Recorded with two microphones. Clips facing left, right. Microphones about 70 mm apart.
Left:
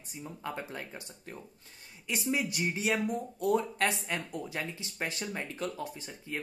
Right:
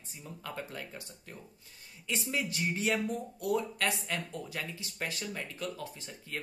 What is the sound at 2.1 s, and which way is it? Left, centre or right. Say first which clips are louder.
Speech: left 2 dB; centre.